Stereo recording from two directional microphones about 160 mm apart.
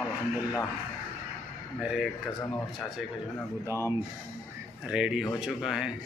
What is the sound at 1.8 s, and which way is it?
Speech, 5° right (ahead or behind).